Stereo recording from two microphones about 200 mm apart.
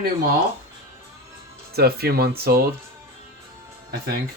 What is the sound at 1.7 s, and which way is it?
Speech, 50° right (ahead or behind).